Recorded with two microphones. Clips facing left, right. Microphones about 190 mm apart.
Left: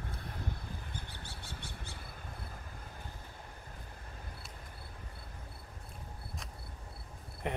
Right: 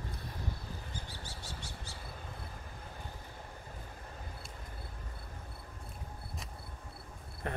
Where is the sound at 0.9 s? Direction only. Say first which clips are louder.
Right 1 dB; 60° left (ahead or behind).